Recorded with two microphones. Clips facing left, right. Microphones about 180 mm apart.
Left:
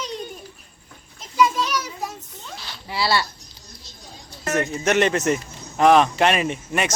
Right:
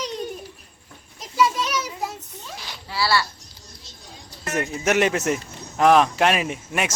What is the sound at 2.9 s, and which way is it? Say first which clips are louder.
Speech: even; 20° left (ahead or behind).